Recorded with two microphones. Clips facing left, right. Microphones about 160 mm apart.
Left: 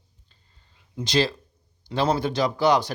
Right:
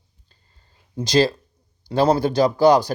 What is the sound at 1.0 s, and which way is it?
Speech, 40° right (ahead or behind).